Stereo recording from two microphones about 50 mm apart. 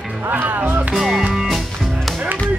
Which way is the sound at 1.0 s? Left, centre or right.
Centre.